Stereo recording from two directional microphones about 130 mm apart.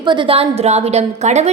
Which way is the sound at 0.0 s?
40° right (ahead or behind).